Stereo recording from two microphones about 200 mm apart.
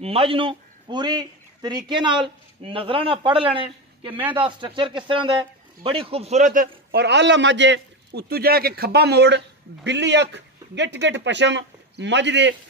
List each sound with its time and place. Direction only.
0.0 s a man's voice: 30° right (ahead or behind); by 12.5 s 65° right (ahead or behind)